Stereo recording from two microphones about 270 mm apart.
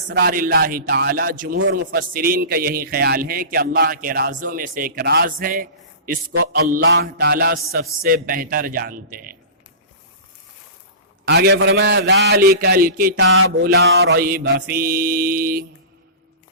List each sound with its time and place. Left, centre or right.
0.1 s a man's voice: right
11.3 s a man's voice: right